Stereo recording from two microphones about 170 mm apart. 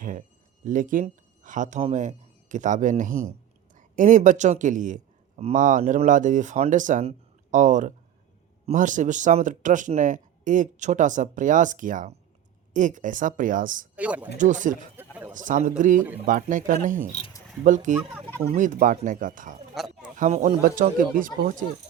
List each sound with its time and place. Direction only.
0.0 s a man's voice: 50° right (ahead or behind)
13.9 s speech: 10° right (ahead or behind)
14.3 s speech: 45° right (ahead or behind)
14.9 s a sound: 10° right (ahead or behind)
15.3 s speech: 50° right (ahead or behind)